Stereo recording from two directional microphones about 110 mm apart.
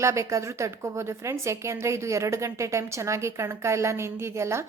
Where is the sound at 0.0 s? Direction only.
25° right (ahead or behind).